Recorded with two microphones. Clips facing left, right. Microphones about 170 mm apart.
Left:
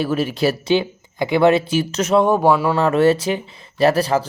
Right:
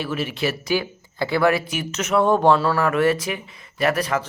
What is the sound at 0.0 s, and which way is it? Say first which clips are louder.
Speech: left 6 dB; 40° left (ahead or behind).